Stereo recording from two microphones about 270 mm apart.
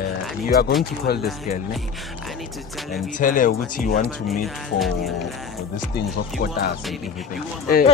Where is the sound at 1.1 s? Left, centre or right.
Left.